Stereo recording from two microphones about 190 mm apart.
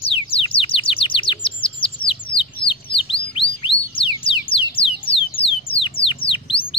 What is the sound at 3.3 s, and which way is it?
Music, 25° left (ahead or behind).